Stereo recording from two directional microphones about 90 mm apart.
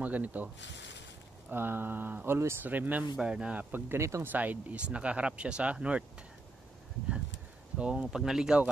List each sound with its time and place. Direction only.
0.0 s speech: 15° right (ahead or behind)
1.5 s speech: 25° right (ahead or behind)
3.7 s speech: 30° right (ahead or behind)
4.3 s speech: 20° right (ahead or behind)
7.7 s speech: 10° right (ahead or behind)